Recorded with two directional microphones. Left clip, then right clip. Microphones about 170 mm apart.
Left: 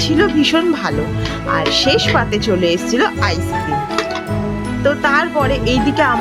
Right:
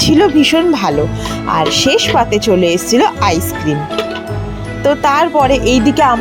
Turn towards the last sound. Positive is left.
turn(degrees=-20)  # may be behind; listen again after turning